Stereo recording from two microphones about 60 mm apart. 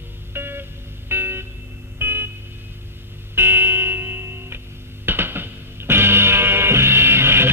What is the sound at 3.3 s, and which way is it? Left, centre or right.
Music, right.